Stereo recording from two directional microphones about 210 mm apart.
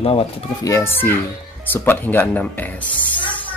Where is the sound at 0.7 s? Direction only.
10° left (ahead or behind).